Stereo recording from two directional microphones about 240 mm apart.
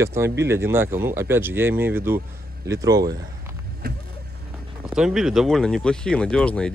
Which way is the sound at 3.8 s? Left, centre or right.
Right.